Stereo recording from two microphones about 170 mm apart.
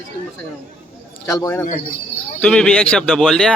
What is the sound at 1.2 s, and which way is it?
Speech, 20° left (ahead or behind).